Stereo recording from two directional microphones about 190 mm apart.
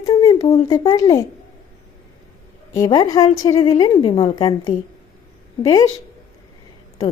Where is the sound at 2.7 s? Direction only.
20° left (ahead or behind).